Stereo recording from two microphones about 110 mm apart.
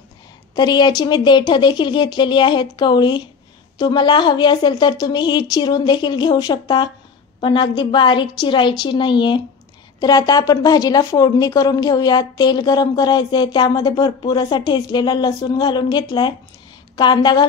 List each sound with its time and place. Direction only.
0.6 s a woman's voice: 40° left (ahead or behind)
9.9 s a woman's voice: 35° left (ahead or behind)